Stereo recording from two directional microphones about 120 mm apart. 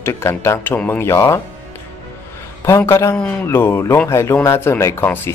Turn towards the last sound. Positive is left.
turn(degrees=20)  # may be behind; listen again after turning